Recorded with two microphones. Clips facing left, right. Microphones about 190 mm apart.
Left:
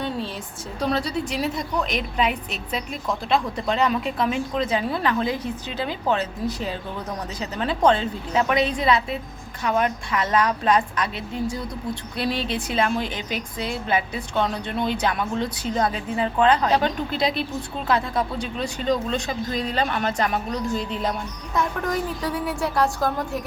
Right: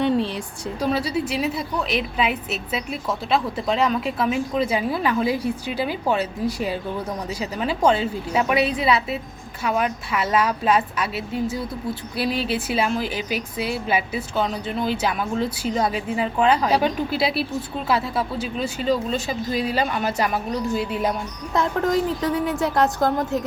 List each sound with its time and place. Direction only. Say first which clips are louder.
0.8 s a woman's voice: right 1 dB; 5° right (ahead or behind)
21.5 s a woman's voice: right 4 dB; 25° right (ahead or behind)